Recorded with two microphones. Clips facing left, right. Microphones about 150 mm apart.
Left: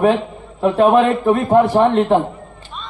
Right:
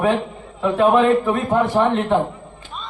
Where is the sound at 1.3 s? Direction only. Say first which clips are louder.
Left 5 dB; 40° left (ahead or behind).